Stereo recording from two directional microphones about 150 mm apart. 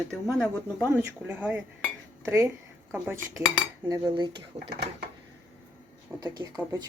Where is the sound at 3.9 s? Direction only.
30° right (ahead or behind).